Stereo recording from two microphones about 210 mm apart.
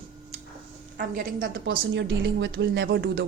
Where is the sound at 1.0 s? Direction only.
45° right (ahead or behind).